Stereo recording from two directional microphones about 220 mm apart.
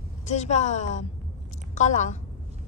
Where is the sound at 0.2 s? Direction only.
30° left (ahead or behind).